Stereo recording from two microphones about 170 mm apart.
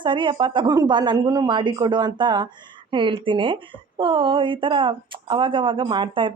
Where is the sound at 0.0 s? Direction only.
30° right (ahead or behind).